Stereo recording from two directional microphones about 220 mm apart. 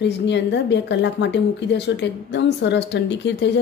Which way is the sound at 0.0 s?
50° left (ahead or behind).